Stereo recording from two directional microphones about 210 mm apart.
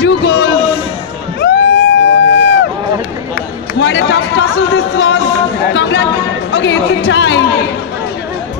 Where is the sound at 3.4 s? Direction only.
60° left (ahead or behind).